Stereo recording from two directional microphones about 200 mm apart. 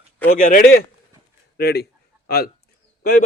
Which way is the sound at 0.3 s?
45° left (ahead or behind).